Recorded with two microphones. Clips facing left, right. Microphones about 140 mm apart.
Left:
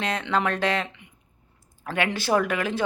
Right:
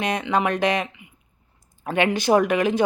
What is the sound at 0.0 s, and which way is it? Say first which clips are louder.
Speech: right 3 dB; 15° right (ahead or behind).